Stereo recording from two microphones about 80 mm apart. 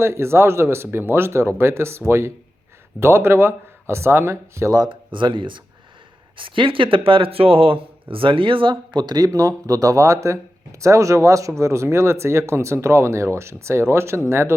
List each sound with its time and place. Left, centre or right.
0.0 s speech: right
4.9 s speech: right
8.2 s speech: right